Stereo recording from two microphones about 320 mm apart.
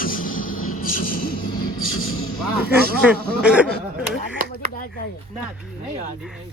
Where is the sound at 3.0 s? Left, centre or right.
Centre.